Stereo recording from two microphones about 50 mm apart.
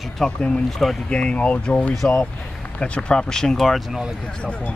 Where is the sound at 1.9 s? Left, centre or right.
Centre.